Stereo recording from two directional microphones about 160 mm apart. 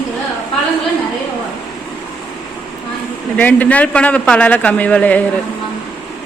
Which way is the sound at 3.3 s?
10° left (ahead or behind).